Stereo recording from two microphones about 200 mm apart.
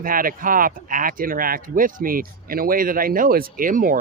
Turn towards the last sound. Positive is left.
turn(degrees=-40)  # may be behind; listen again after turning